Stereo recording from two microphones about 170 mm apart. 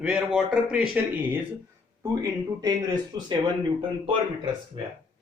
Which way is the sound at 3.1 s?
25° right (ahead or behind).